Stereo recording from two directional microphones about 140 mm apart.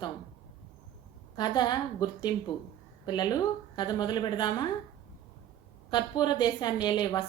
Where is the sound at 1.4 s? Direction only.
30° left (ahead or behind).